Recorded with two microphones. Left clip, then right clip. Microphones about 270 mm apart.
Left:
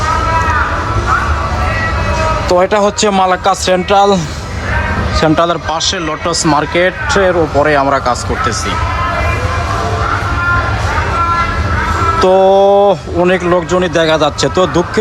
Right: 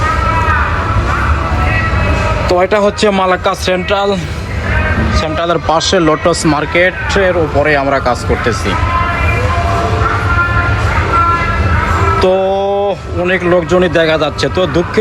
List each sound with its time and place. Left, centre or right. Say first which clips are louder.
2.5 s speech: even; centre
5.5 s speech: right 3 dB; centre
12.2 s speech: left 7 dB; left